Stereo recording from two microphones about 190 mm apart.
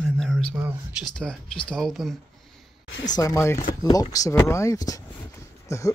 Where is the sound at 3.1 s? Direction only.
15° left (ahead or behind).